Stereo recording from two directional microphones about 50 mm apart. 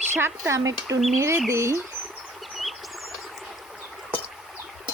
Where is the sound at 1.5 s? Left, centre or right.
Right.